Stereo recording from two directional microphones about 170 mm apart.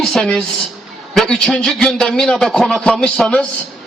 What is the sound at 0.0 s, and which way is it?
A man's voice, 5° left (ahead or behind).